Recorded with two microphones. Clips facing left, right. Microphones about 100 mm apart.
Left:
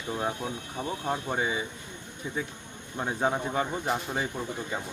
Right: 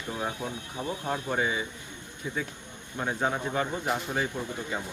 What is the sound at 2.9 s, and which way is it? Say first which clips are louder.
Speech: left 1 dB; 15° left (ahead or behind).